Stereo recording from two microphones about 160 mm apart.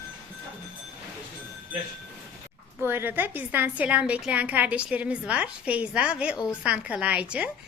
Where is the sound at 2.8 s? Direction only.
15° right (ahead or behind).